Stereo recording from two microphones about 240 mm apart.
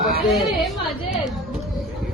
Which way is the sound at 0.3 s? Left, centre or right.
Centre.